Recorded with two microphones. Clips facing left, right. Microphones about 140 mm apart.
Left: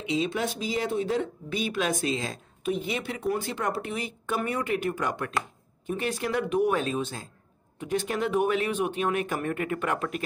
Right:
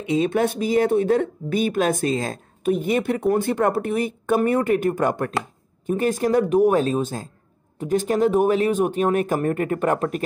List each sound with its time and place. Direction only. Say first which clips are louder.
0.1 s speech: right 8 dB; 55° right (ahead or behind)